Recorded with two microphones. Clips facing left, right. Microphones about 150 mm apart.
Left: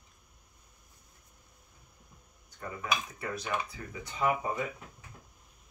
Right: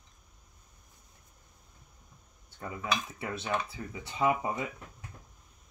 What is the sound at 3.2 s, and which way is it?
Speech, 25° right (ahead or behind).